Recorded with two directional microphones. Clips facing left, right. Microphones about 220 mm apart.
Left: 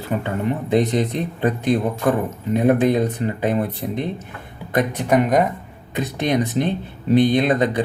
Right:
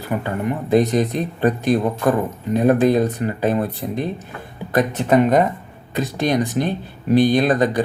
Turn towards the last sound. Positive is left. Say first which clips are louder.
# right 1 dB
turn(degrees=20)  # may be behind; listen again after turning